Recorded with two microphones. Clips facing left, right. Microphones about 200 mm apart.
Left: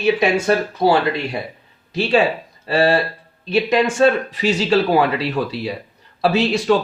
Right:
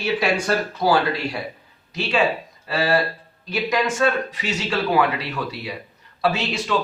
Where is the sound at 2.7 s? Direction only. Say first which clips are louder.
Left 4 dB; 30° left (ahead or behind).